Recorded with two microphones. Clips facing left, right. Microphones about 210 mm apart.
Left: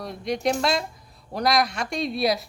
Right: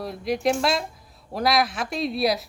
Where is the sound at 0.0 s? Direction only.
Centre (ahead or behind).